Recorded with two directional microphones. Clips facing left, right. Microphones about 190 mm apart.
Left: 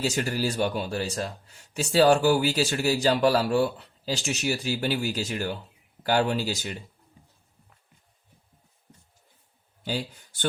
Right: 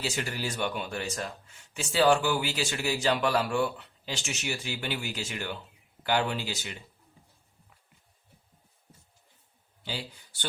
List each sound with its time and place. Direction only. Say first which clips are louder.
0.0 s speech: left 6 dB; 40° left (ahead or behind)
9.8 s speech: left 7 dB; 45° left (ahead or behind)